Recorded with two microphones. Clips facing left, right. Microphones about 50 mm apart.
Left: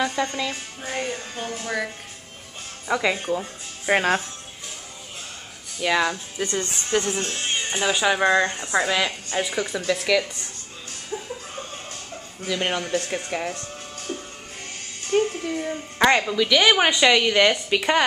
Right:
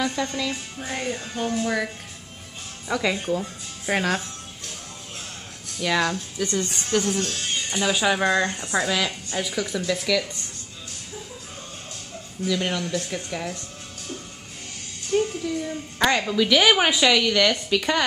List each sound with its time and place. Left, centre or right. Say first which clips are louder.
0.0 s speech: left 1 dB; left
2.9 s speech: left 1 dB; centre
5.8 s speech: left 1 dB; centre
6.4 s speech: even; left
6.9 s speech: even; centre
7.2 s speech: left 1 dB; left
7.9 s speech: left 1 dB; centre
8.2 s speech: left 2 dB; left
9.8 s speech: left 3 dB; centre
12.4 s speech: even; left
15.1 s a woman's voice: left 1 dB; left
16.2 s a woman's voice: even; centre
17.0 s speech: left 2 dB; centre